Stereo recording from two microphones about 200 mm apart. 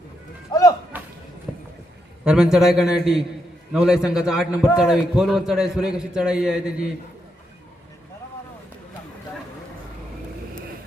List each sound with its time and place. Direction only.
0.5 s music: 20° left (ahead or behind)
2.2 s a man's voice: 5° right (ahead or behind)